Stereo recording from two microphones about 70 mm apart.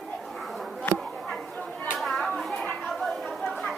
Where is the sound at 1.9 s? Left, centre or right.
Centre.